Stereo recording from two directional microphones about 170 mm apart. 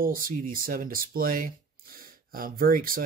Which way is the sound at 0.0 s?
60° right (ahead or behind).